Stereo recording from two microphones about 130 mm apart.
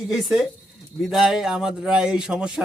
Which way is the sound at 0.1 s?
Centre (ahead or behind).